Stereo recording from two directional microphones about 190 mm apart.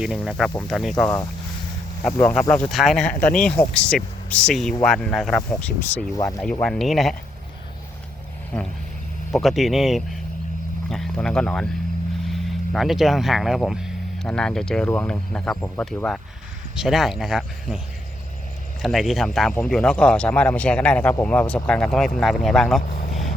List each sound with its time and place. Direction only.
0.0 s a man's voice: centre (ahead or behind)
2.1 s a man's voice: 10° left (ahead or behind)
6.1 s speech: 15° left (ahead or behind)
6.4 s a man's voice: 5° left (ahead or behind)
9.3 s a man's voice: centre (ahead or behind)
18.8 s a man's voice: centre (ahead or behind)
22.8 s vehicle: 45° left (ahead or behind)